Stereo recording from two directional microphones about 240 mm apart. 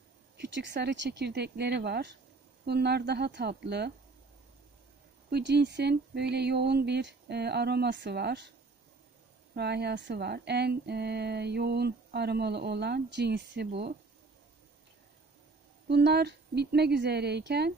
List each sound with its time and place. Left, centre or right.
0.4 s speech: right
5.3 s speech: right
9.6 s speech: right
15.9 s speech: right